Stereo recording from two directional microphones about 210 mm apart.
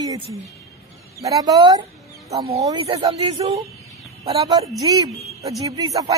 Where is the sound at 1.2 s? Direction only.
20° right (ahead or behind).